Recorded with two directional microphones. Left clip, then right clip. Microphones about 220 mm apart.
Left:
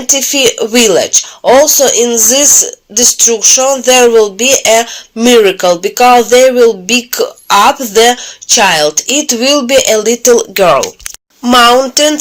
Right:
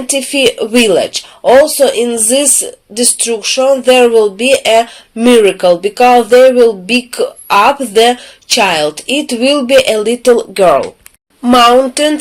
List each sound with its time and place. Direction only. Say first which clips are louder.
0.1 s speech: left 2 dB; 20° left (ahead or behind)